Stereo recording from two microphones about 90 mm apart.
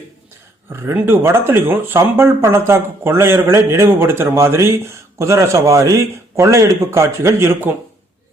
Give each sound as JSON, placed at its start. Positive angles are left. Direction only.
{"t": 0.7, "sound": "speech", "side_deg": -25}